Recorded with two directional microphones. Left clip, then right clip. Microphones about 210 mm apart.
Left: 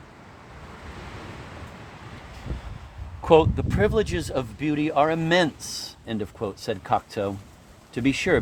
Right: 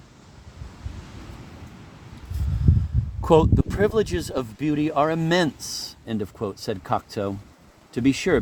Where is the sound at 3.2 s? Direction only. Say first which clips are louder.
Even; 55° right (ahead or behind).